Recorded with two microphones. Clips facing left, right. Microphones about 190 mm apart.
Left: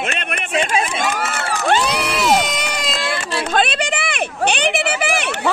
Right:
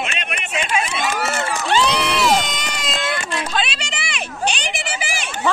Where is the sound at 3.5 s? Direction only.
55° left (ahead or behind).